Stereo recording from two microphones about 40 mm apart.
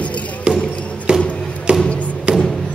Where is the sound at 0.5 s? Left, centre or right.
Right.